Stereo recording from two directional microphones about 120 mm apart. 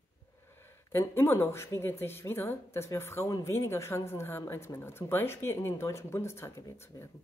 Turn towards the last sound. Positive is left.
turn(degrees=20)  # may be behind; listen again after turning